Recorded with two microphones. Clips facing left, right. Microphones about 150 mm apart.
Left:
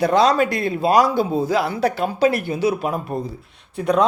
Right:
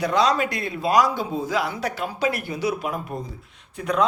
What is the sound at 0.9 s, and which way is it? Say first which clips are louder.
Speech: left 2 dB; 65° left (ahead or behind).